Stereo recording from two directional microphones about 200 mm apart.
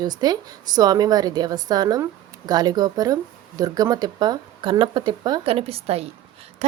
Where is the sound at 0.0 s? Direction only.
20° right (ahead or behind).